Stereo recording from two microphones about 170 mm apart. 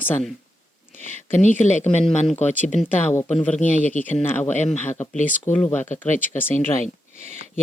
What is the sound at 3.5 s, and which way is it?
Speech, 50° left (ahead or behind).